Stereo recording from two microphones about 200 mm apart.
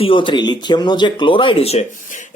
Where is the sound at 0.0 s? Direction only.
25° left (ahead or behind).